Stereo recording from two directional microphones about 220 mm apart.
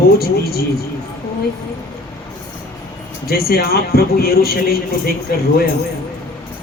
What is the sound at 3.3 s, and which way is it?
A man's voice, 45° left (ahead or behind).